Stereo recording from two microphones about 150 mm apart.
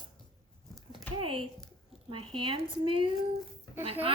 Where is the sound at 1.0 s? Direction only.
35° right (ahead or behind).